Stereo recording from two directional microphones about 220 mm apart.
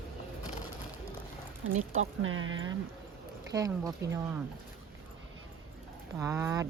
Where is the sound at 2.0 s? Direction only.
65° right (ahead or behind).